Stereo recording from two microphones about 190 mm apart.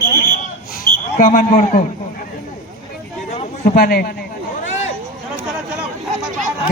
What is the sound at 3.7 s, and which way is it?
Speech, 50° left (ahead or behind).